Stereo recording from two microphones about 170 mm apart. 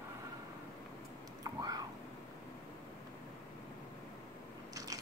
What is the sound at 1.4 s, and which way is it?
Whispering, 20° right (ahead or behind).